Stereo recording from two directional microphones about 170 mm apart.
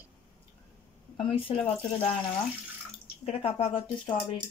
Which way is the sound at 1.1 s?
30° left (ahead or behind).